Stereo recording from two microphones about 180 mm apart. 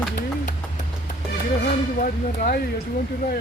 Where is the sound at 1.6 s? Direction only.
50° left (ahead or behind).